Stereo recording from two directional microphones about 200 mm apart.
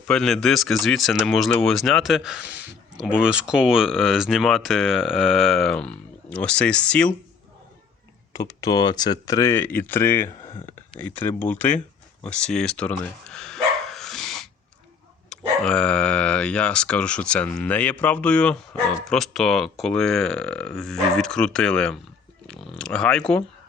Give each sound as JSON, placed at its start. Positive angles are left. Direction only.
{"t": 0.1, "sound": "speech", "side_deg": 0}
{"t": 8.3, "sound": "speech", "side_deg": 15}
{"t": 12.2, "sound": "bow-wow", "side_deg": 5}
{"t": 15.3, "sound": "speech", "side_deg": 5}